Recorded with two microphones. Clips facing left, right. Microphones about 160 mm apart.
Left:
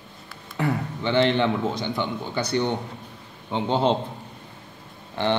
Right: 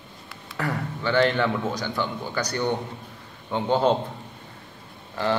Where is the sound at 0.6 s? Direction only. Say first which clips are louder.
Left 3 dB; 20° left (ahead or behind).